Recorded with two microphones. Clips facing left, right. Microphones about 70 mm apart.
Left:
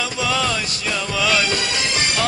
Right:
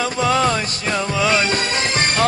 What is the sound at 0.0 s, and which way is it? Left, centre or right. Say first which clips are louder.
Music: right 4 dB; right.